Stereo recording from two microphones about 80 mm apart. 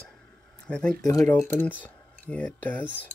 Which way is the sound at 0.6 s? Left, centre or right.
Centre.